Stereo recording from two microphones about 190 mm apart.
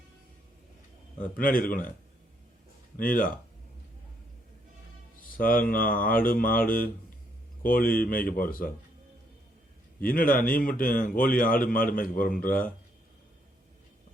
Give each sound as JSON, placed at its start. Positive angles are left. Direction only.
{"t": 1.4, "sound": "a man's voice", "side_deg": 45}
{"t": 3.0, "sound": "a man's voice", "side_deg": 45}
{"t": 5.4, "sound": "a man's voice", "side_deg": 50}
{"t": 10.0, "sound": "a man's voice", "side_deg": 50}